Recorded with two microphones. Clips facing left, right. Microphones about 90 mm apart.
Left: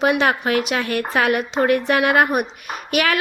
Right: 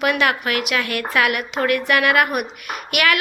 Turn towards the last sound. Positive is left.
turn(degrees=30)  # may be behind; listen again after turning